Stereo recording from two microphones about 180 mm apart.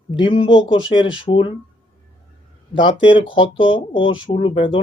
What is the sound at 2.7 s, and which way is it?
Speech, 25° left (ahead or behind).